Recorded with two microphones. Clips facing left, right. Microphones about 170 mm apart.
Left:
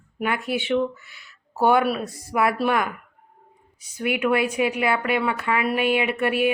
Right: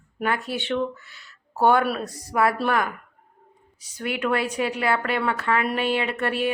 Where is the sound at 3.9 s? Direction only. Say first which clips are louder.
Left 3 dB; 10° left (ahead or behind).